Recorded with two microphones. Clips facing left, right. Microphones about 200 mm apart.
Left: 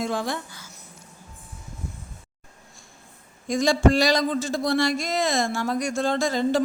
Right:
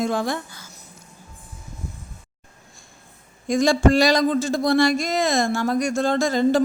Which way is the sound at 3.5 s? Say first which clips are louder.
Right 2 dB; 50° right (ahead or behind).